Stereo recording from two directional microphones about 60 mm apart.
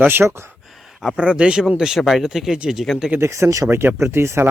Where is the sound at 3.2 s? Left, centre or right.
Right.